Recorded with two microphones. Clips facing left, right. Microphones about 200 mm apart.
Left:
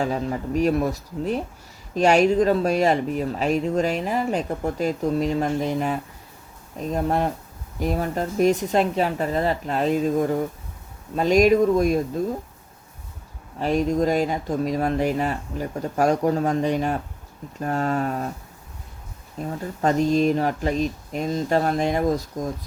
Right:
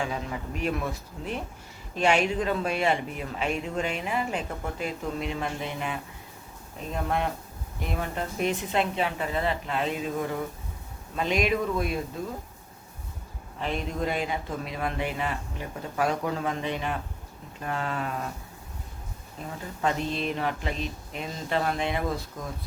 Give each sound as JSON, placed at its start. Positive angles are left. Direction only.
{"t": 0.0, "sound": "a man's voice", "side_deg": 40}
{"t": 13.6, "sound": "a man's voice", "side_deg": 40}
{"t": 19.4, "sound": "a man's voice", "side_deg": 40}